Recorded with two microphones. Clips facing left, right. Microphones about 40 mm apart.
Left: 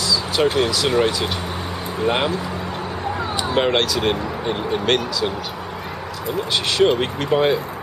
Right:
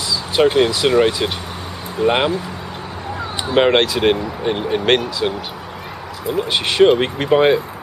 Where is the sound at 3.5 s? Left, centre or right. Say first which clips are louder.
Right 5 dB; right.